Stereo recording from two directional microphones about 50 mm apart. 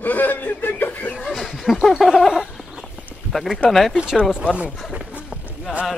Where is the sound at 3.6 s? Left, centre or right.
Centre.